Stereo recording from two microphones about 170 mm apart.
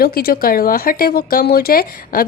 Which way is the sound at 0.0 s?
65° left (ahead or behind).